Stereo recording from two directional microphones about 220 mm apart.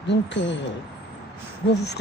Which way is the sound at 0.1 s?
55° left (ahead or behind).